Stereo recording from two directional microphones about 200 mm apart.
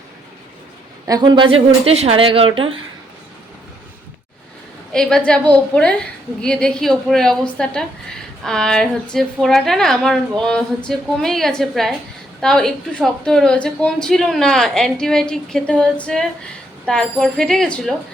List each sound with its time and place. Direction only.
1.0 s a woman's voice: 20° right (ahead or behind)
4.9 s a woman's voice: centre (ahead or behind)